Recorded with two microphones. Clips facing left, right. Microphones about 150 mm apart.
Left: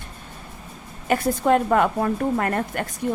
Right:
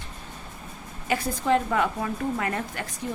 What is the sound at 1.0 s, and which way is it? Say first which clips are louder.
Speech: left 5 dB; 55° left (ahead or behind).